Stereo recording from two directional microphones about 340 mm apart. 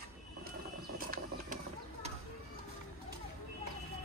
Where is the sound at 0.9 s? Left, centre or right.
Right.